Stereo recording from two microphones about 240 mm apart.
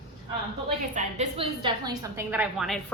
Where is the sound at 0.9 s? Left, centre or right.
Right.